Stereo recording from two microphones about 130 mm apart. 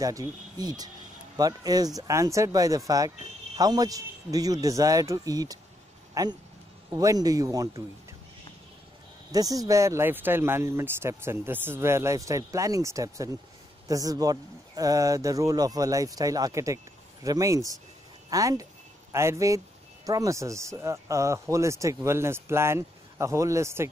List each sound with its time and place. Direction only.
0.6 s speech: 30° right (ahead or behind)
9.3 s speech: 30° right (ahead or behind)